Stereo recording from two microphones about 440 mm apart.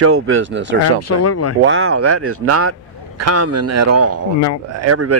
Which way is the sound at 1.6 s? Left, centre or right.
Right.